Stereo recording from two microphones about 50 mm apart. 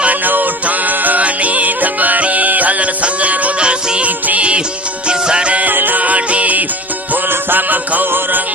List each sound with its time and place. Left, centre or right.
0.0 s music: right
5.7 s music: right